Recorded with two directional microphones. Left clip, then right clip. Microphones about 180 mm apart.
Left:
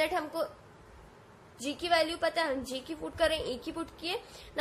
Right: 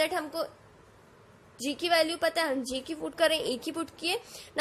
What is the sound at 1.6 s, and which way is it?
A woman's voice, 30° right (ahead or behind).